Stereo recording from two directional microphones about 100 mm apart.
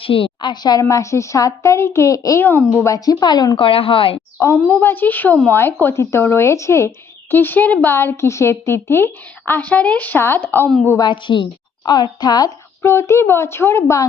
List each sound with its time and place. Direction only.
0.0 s a woman's voice: 65° left (ahead or behind)
0.4 s a woman's voice: 45° left (ahead or behind)
2.4 s a woman's voice: 20° left (ahead or behind)
2.8 s a woman's voice: 35° left (ahead or behind)
3.6 s a woman's voice: 70° left (ahead or behind)
4.5 s a woman's voice: 20° left (ahead or behind)
11.1 s a woman's voice: 55° left (ahead or behind)
12.8 s a woman's voice: 25° left (ahead or behind)